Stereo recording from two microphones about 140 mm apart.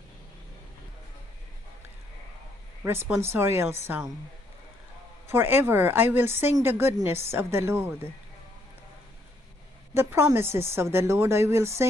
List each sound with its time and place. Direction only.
2.8 s a woman's voice: 20° right (ahead or behind)
5.3 s a woman's voice: 15° right (ahead or behind)
9.9 s a woman's voice: 15° right (ahead or behind)